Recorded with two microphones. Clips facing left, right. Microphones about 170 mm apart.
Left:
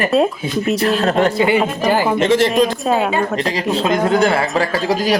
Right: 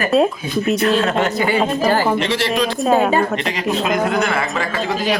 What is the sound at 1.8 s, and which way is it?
Speech, 15° left (ahead or behind).